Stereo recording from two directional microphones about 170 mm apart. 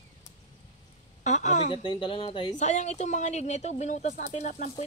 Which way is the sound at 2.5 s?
45° left (ahead or behind).